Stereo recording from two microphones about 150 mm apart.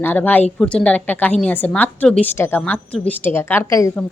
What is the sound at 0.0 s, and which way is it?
A woman's voice, 10° left (ahead or behind).